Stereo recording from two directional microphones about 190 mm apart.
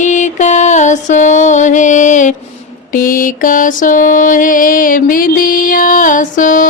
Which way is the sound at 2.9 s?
45° left (ahead or behind).